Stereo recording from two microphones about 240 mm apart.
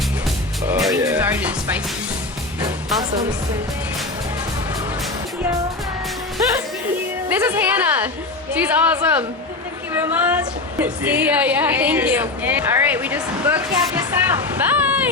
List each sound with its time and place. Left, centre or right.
0.7 s music: centre
2.6 s music: centre
7.3 s a woman's voice: centre